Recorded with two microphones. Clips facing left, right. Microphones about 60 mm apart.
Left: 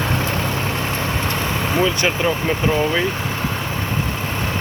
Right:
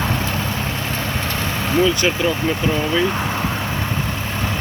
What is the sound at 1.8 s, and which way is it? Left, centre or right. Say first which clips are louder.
Speech: right 2 dB; left.